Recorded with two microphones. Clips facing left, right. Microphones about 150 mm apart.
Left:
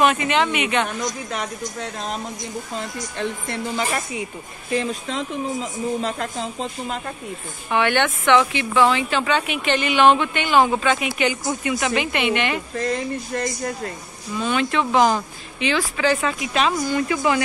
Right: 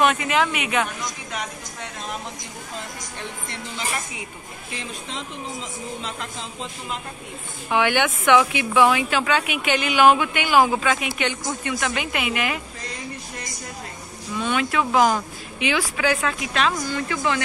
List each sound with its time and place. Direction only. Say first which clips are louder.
0.0 s speech: left 2 dB; centre (ahead or behind)
1.0 s speech: left 4 dB; 40° left (ahead or behind)
4.7 s speech: left 10 dB; 45° left (ahead or behind)
7.7 s speech: left 1 dB; 10° right (ahead or behind)
12.7 s speech: left 13 dB; 50° left (ahead or behind)
14.4 s speech: left 1 dB; centre (ahead or behind)
16.2 s a woman's voice: left 2 dB; 5° left (ahead or behind)